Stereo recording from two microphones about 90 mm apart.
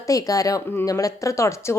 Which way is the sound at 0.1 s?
40° left (ahead or behind).